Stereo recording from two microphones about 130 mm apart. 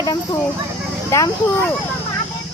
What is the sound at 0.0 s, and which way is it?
Speech, 30° left (ahead or behind).